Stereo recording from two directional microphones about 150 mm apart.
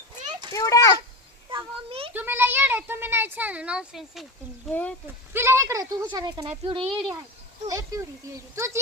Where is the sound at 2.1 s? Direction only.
15° right (ahead or behind).